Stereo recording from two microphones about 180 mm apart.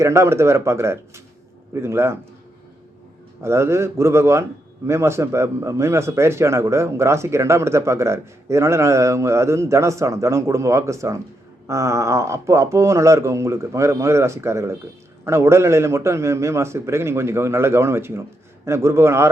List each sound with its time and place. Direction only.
0.0 s speech: 15° right (ahead or behind)
3.4 s speech: 15° right (ahead or behind)